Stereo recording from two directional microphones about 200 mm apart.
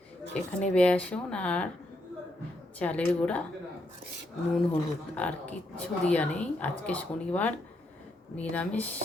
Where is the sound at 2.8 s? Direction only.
5° left (ahead or behind).